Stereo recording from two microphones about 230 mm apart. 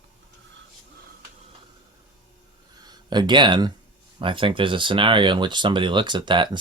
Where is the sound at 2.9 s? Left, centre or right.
Centre.